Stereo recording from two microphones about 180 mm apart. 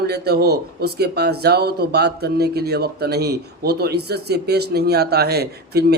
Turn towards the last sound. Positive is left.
turn(degrees=-60)  # may be behind; listen again after turning